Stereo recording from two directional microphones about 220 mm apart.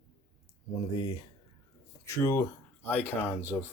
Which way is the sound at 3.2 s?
10° right (ahead or behind).